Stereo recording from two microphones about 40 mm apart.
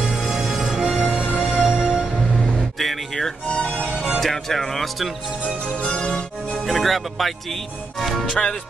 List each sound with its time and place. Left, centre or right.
0.0 s music: centre
2.8 s music: centre
3.4 s music: left
4.2 s speech: centre
5.7 s music: left
6.6 s speech: centre
8.3 s music: left